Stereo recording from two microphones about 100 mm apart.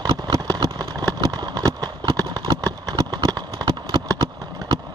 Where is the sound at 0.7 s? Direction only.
40° right (ahead or behind).